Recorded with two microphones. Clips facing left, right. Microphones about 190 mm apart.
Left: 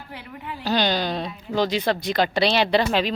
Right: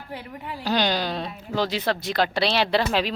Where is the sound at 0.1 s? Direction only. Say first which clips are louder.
Right 2 dB; 40° right (ahead or behind).